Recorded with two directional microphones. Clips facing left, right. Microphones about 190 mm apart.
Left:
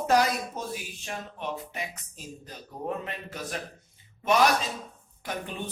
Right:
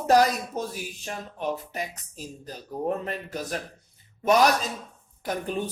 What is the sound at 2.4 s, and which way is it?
Speech, 40° right (ahead or behind).